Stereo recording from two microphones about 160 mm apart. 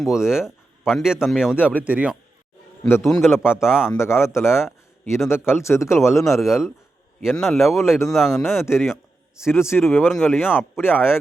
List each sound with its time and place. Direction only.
0.0 s a man's voice: 5° right (ahead or behind)
2.8 s speech: 15° left (ahead or behind)
3.1 s a man's voice: centre (ahead or behind)
3.8 s speech: 15° left (ahead or behind)
5.0 s a man's voice: centre (ahead or behind)
5.5 s speech: 15° left (ahead or behind)
6.1 s a man's voice: centre (ahead or behind)
8.8 s a sound: 5° right (ahead or behind)
9.5 s speech: 15° left (ahead or behind)
10.1 s a man's voice: centre (ahead or behind)